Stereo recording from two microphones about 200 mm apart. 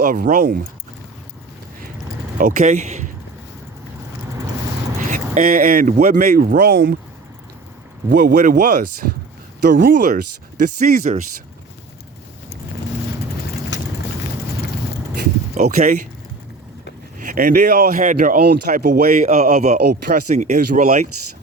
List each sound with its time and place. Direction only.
0.0 s speech: 45° right (ahead or behind)
2.4 s speech: 40° right (ahead or behind)
4.9 s speech: 40° right (ahead or behind)
8.1 s speech: 45° right (ahead or behind)
13.7 s vehicle: 65° left (ahead or behind)
15.5 s speech: 40° right (ahead or behind)
17.2 s speech: 45° right (ahead or behind)